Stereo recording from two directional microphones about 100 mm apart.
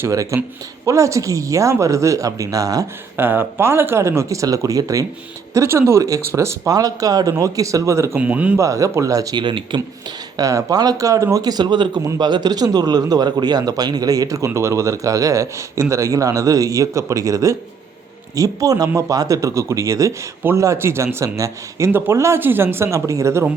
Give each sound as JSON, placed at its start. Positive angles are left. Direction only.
{"t": 0.0, "sound": "a man's voice", "side_deg": -30}
{"t": 3.2, "sound": "speech", "side_deg": -20}
{"t": 5.5, "sound": "a man's voice", "side_deg": -25}
{"t": 8.2, "sound": "speech", "side_deg": -15}
{"t": 8.5, "sound": "a man's voice", "side_deg": -30}
{"t": 9.4, "sound": "speech", "side_deg": -55}
{"t": 10.3, "sound": "a man's voice", "side_deg": -35}